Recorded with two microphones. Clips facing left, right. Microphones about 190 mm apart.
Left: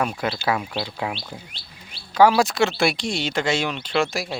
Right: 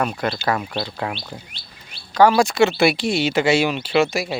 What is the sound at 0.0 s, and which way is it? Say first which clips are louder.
Speech: right 2 dB; 5° left (ahead or behind).